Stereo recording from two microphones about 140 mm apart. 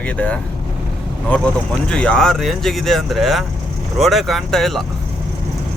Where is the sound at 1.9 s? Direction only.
5° left (ahead or behind).